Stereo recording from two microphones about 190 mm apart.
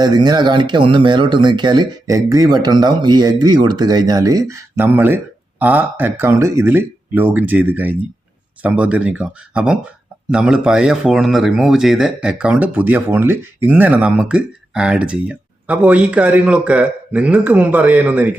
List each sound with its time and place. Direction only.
0.0 s speech: 20° right (ahead or behind)